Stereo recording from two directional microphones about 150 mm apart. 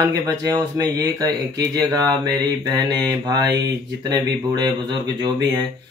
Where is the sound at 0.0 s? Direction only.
25° right (ahead or behind).